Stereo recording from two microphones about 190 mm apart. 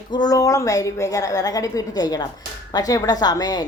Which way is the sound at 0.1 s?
20° left (ahead or behind).